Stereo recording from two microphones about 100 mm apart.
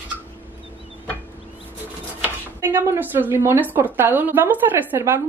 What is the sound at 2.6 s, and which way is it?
A woman's voice, 25° right (ahead or behind).